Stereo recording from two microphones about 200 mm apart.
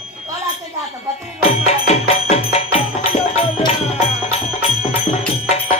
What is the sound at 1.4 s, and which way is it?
Music, 30° left (ahead or behind).